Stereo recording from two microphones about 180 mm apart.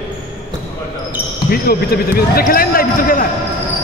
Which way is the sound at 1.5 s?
60° left (ahead or behind).